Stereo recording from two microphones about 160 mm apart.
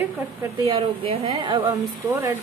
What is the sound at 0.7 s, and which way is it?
Speech, 35° right (ahead or behind).